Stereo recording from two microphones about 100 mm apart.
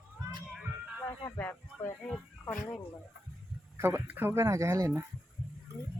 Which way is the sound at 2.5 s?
10° left (ahead or behind).